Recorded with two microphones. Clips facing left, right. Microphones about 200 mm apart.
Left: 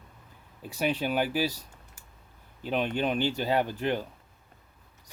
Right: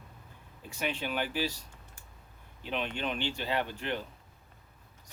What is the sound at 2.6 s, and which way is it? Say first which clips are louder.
Speech: left 6 dB; 40° left (ahead or behind).